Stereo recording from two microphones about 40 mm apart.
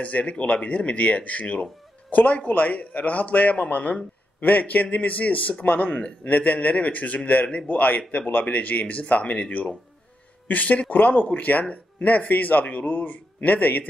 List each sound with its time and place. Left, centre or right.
0.0 s speech: left